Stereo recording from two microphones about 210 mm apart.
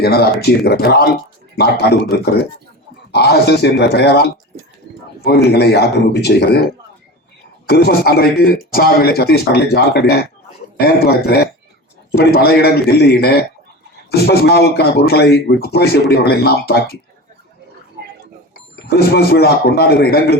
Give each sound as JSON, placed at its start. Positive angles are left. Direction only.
{"t": 0.0, "sound": "a man's voice", "side_deg": 50}
{"t": 3.1, "sound": "a man's voice", "side_deg": 50}
{"t": 7.7, "sound": "a man's voice", "side_deg": 50}
{"t": 18.9, "sound": "a man's voice", "side_deg": 50}